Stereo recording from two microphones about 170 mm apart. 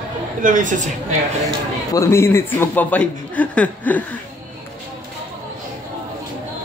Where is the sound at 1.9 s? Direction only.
15° left (ahead or behind).